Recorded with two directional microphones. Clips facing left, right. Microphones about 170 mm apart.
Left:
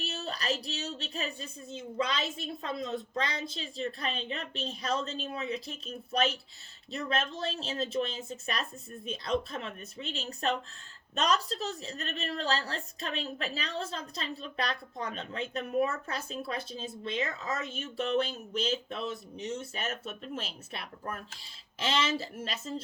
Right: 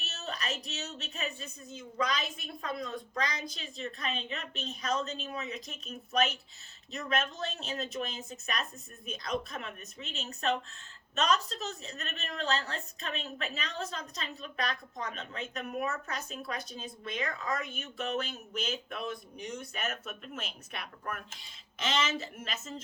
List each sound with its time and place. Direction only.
0.0 s a woman's voice: 35° left (ahead or behind)